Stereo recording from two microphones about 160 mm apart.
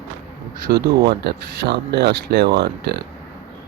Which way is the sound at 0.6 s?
90° right.